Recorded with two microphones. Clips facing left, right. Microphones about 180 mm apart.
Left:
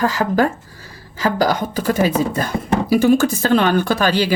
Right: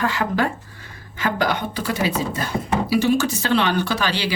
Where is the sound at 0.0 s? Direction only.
40° left (ahead or behind).